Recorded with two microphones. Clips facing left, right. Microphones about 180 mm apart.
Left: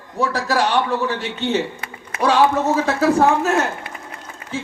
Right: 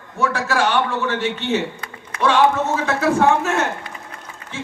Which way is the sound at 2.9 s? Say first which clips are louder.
Right 1 dB; 35° left (ahead or behind).